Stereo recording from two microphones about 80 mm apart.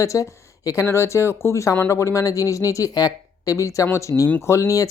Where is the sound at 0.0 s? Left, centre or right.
Left.